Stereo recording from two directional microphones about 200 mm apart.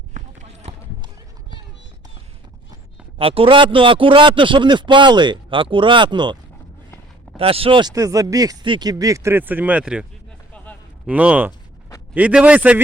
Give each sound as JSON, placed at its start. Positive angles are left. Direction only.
{"t": 0.1, "sound": "run", "side_deg": -35}
{"t": 3.2, "sound": "speech", "side_deg": -25}
{"t": 7.3, "sound": "speech", "side_deg": -30}